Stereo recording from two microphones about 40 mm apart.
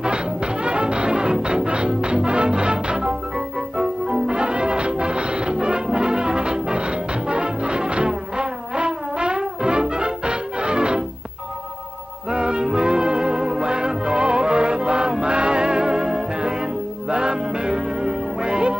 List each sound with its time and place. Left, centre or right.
0.0 s music: right
12.3 s music: right